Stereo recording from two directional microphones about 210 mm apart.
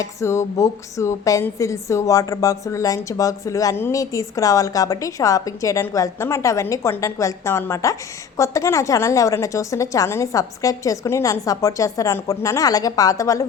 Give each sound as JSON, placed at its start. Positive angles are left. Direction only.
{"t": 0.0, "sound": "speech", "side_deg": 15}